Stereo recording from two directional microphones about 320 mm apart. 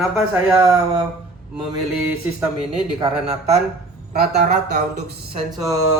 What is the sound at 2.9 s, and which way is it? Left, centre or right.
Mantra, centre.